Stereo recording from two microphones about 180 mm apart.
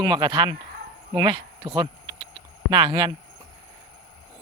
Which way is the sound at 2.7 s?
25° right (ahead or behind).